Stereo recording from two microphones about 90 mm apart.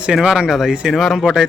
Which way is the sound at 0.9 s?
5° left (ahead or behind).